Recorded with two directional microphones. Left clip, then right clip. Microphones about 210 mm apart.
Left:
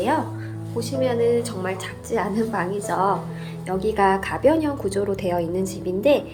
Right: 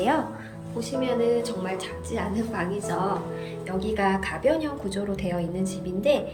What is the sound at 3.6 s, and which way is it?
A woman's voice, 20° left (ahead or behind).